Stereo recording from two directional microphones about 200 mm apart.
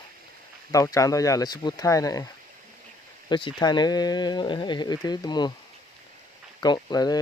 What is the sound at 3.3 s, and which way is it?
Speech, 25° left (ahead or behind).